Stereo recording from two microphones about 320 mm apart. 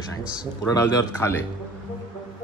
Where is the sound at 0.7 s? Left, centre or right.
Centre.